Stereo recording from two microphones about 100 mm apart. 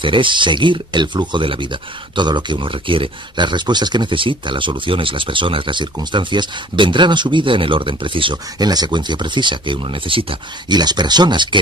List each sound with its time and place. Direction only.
0.0 s speech: 55° right (ahead or behind)
8.5 s speech: 45° right (ahead or behind); by 10.3 s 60° right (ahead or behind)
10.7 s speech: 45° right (ahead or behind)